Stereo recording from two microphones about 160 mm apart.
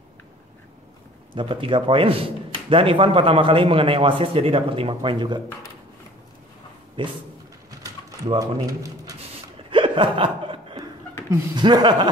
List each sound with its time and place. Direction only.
1.3 s a man's voice: 35° right (ahead or behind)
7.0 s a man's voice: 30° right (ahead or behind)
8.4 s speech: 20° right (ahead or behind)
9.7 s chuckle: 30° right (ahead or behind)
11.2 s speech: 25° right (ahead or behind)